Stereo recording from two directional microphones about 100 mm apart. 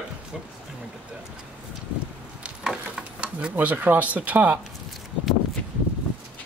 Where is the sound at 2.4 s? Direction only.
10° right (ahead or behind).